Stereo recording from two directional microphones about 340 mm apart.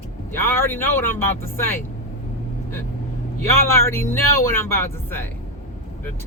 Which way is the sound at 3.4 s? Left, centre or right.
Centre.